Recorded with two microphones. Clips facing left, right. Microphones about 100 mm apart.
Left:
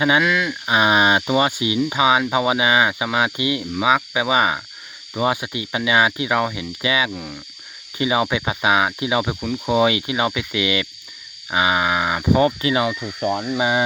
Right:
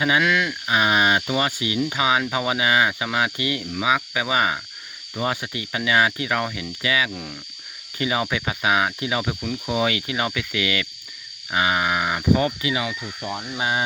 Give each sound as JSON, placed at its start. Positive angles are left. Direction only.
{"t": 0.2, "sound": "speech", "side_deg": 5}
{"t": 0.7, "sound": "speech", "side_deg": 25}
{"t": 7.1, "sound": "speech", "side_deg": 5}
{"t": 7.9, "sound": "speech", "side_deg": 20}
{"t": 12.6, "sound": "speech", "side_deg": 40}